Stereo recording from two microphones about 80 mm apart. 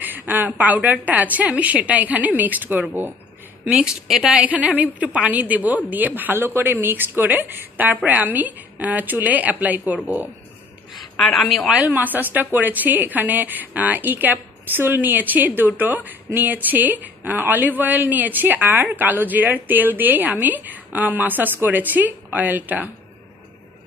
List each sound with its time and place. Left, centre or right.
0.0 s a sound: right
1.0 s a woman's voice: right
11.1 s a woman's voice: centre
11.4 s a woman's voice: centre
11.7 s a woman's voice: centre